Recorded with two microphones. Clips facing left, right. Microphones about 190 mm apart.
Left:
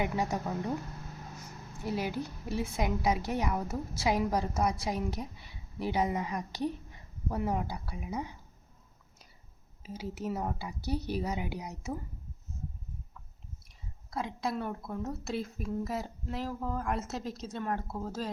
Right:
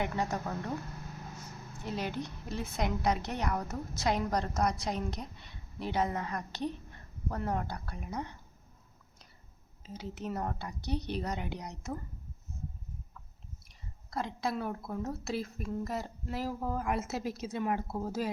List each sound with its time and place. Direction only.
0.0 s a woman's voice: 10° left (ahead or behind)
1.8 s a woman's voice: 10° left (ahead or behind)
9.8 s a woman's voice: 10° left (ahead or behind)
14.1 s a woman's voice: centre (ahead or behind)